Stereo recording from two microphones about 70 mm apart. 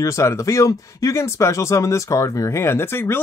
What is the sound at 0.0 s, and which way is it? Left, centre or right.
Speech, left.